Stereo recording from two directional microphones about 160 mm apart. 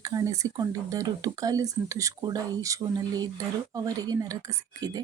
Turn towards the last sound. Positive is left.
turn(degrees=-25)  # may be behind; listen again after turning